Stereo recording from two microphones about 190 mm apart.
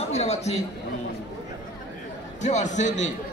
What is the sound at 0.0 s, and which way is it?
Chatter, 35° left (ahead or behind).